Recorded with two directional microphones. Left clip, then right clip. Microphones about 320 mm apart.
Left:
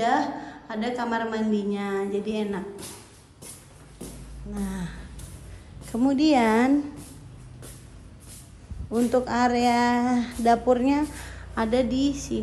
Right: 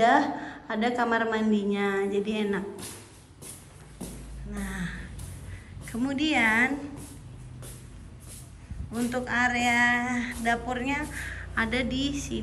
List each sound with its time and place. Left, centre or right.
0.0 s a sound: centre
0.8 s a woman's voice: centre
4.5 s a woman's voice: centre
9.1 s a woman's voice: centre